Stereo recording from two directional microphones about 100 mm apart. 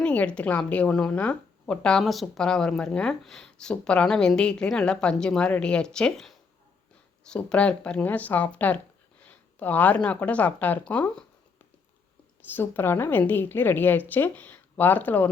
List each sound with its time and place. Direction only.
0.0 s a woman's voice: 15° left (ahead or behind)
12.5 s a woman's voice: 20° left (ahead or behind)